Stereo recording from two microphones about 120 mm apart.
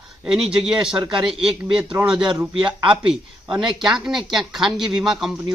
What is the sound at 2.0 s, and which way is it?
Speech, 35° right (ahead or behind).